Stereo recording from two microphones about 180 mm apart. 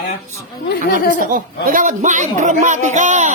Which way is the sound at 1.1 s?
50° right (ahead or behind).